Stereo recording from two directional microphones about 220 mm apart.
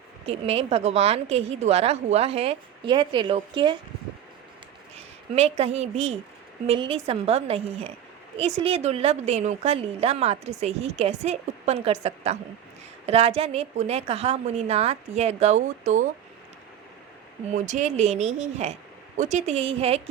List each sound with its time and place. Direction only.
0.3 s a woman's voice: 25° right (ahead or behind)
5.3 s a woman's voice: 30° right (ahead or behind)
17.5 s speech: 35° right (ahead or behind)